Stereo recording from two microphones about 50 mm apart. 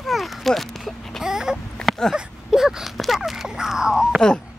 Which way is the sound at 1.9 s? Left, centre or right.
Centre.